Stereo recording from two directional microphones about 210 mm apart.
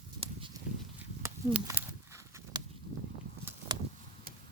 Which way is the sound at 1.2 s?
15° right (ahead or behind).